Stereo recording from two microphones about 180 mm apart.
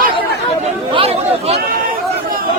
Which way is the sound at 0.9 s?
35° right (ahead or behind).